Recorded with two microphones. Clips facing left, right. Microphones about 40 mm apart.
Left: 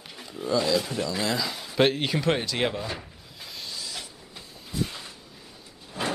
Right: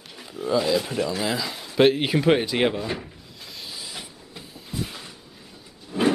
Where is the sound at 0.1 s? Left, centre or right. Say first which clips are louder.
Right 3 dB; centre.